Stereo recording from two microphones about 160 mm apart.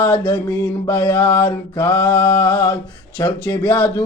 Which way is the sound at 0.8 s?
10° left (ahead or behind).